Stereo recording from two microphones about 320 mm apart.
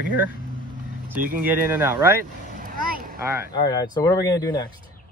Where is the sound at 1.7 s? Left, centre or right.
Centre.